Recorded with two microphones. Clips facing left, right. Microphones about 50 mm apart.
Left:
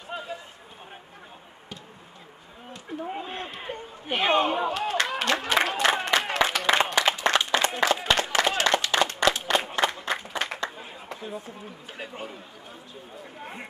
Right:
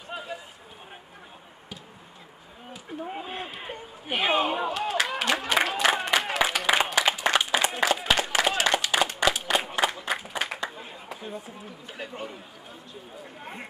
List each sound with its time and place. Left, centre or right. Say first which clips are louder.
0.1 s run: left 1 dB; centre
2.7 s a sound: left 2 dB; centre
12.0 s speech: right 1 dB; centre